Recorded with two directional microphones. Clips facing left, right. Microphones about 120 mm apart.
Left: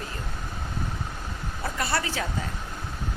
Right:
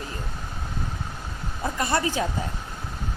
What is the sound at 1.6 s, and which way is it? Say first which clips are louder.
Speech: right 4 dB; 20° right (ahead or behind).